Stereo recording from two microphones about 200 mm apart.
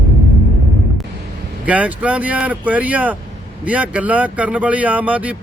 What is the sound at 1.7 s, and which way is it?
Speech, 5° right (ahead or behind).